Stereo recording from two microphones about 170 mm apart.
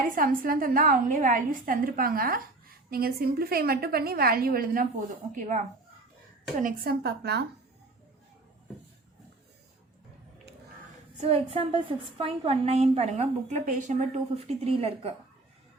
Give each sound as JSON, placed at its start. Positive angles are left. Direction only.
{"t": 0.2, "sound": "a woman's voice", "side_deg": -55}
{"t": 6.6, "sound": "speech", "side_deg": -55}
{"t": 11.2, "sound": "a woman's voice", "side_deg": -35}